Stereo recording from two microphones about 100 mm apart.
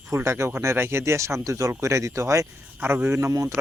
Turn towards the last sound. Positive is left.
turn(degrees=-30)  # may be behind; listen again after turning